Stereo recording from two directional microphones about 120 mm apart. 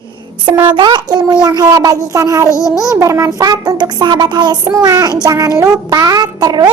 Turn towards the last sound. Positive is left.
turn(degrees=-35)  # may be behind; listen again after turning